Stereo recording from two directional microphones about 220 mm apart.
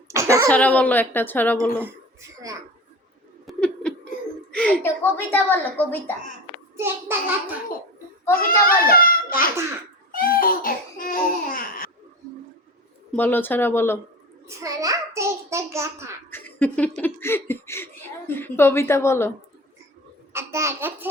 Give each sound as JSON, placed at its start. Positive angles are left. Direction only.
{"t": 0.1, "sound": "a sound", "side_deg": -15}
{"t": 0.4, "sound": "laughter", "side_deg": 5}
{"t": 3.4, "sound": "a sound", "side_deg": 5}
{"t": 4.5, "sound": "laughter", "side_deg": 5}
{"t": 6.7, "sound": "a child's voice", "side_deg": -10}
{"t": 8.4, "sound": "a child's voice", "side_deg": 40}
{"t": 10.1, "sound": "babbling", "side_deg": 40}
{"t": 13.1, "sound": "laughter", "side_deg": 10}
{"t": 14.4, "sound": "a child's voice", "side_deg": -15}
{"t": 16.3, "sound": "laughter", "side_deg": 10}
{"t": 20.3, "sound": "laughter", "side_deg": -10}